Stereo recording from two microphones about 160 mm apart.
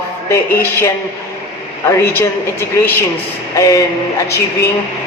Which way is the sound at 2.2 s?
15° left (ahead or behind).